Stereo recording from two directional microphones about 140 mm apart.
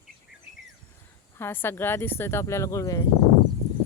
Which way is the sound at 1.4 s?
15° left (ahead or behind).